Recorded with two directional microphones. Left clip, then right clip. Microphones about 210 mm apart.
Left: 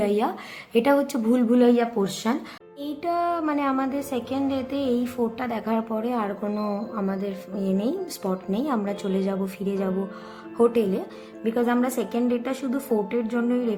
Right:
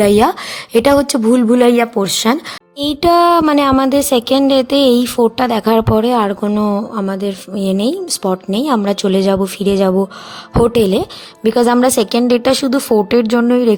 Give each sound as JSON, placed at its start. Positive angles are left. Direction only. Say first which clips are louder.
{"t": 0.0, "sound": "speech", "louder": "right 13 dB", "side_deg": -50}